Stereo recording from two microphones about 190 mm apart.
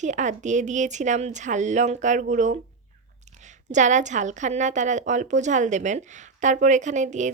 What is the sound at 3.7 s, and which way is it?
A woman's voice, 40° right (ahead or behind).